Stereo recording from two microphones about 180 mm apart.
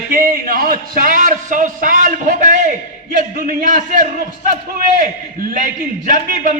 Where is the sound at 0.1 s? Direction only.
50° right (ahead or behind).